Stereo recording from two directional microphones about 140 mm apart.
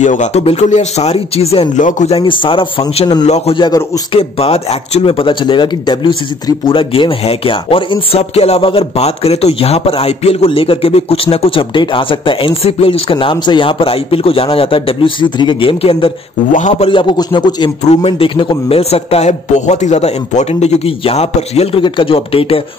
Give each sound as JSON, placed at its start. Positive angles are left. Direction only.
{"t": 0.0, "sound": "a man's voice", "side_deg": 60}
{"t": 1.8, "sound": "a man's voice", "side_deg": 65}
{"t": 2.0, "sound": "speech", "side_deg": 40}
{"t": 3.3, "sound": "a man's voice", "side_deg": 50}
{"t": 3.5, "sound": "a man's voice", "side_deg": 30}
{"t": 4.1, "sound": "speech", "side_deg": 45}
{"t": 16.5, "sound": "a man's voice", "side_deg": 60}
{"t": 16.9, "sound": "speech", "side_deg": 35}
{"t": 17.8, "sound": "a man's voice", "side_deg": 45}
{"t": 21.8, "sound": "speech", "side_deg": 40}